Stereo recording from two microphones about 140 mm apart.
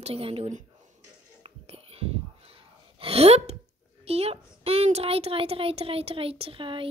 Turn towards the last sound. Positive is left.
turn(degrees=-40)  # may be behind; listen again after turning